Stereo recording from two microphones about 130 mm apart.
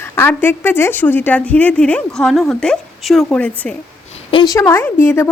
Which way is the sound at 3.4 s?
10° left (ahead or behind).